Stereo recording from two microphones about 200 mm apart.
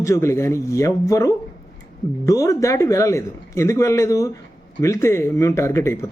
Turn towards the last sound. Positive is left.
turn(degrees=15)  # may be behind; listen again after turning